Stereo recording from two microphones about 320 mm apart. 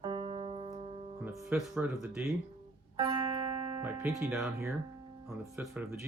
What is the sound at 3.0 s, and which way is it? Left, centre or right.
Music, centre.